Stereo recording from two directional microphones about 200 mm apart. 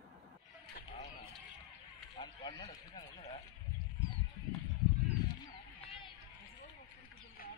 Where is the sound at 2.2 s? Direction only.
20° left (ahead or behind).